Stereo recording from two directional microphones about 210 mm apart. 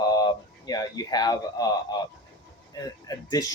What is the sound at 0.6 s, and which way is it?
Speech, 15° left (ahead or behind).